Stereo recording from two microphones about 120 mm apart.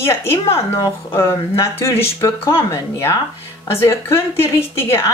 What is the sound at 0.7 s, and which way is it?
Speech, 25° left (ahead or behind).